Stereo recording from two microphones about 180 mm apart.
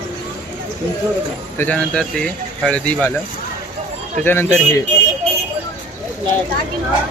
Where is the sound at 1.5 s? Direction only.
5° left (ahead or behind).